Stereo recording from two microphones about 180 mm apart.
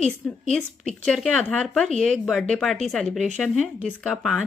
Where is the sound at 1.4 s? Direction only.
5° left (ahead or behind).